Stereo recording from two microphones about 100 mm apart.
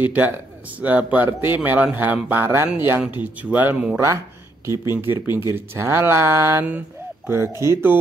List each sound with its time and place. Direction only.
0.0 s speech: 15° right (ahead or behind)